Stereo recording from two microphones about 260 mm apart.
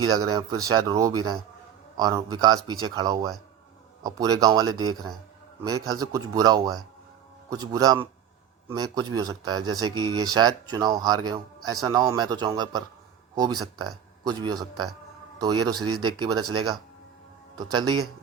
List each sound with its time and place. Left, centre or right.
0.0 s speech: centre
17.7 s speech: centre